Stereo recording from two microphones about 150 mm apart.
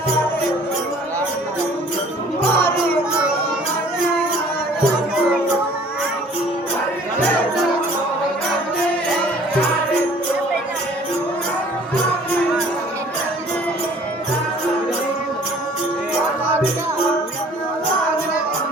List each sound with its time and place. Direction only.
2.6 s music: 15° left (ahead or behind)